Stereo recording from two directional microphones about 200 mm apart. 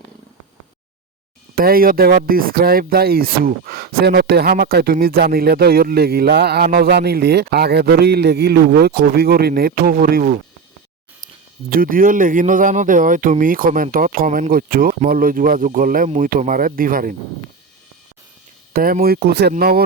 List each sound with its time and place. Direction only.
1.5 s speech: 45° right (ahead or behind)
11.7 s speech: 45° right (ahead or behind)
18.7 s speech: 45° right (ahead or behind)